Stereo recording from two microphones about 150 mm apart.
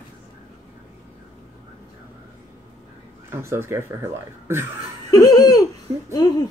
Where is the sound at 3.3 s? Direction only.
15° right (ahead or behind).